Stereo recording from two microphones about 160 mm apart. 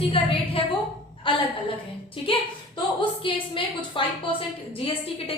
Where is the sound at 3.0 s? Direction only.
35° left (ahead or behind).